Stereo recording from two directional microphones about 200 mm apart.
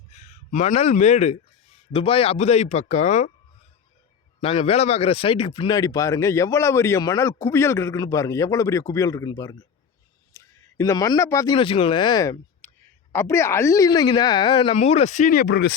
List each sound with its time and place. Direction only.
0.1 s speech: 35° left (ahead or behind)
4.4 s speech: 30° left (ahead or behind); by 11.5 s 15° left (ahead or behind)
11.5 s speech: 25° left (ahead or behind); by 15.7 s 55° left (ahead or behind)